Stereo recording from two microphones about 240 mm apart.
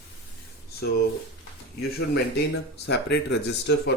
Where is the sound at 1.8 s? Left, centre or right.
Left.